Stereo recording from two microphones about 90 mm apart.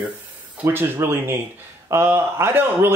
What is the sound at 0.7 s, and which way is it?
A man's voice, 30° right (ahead or behind).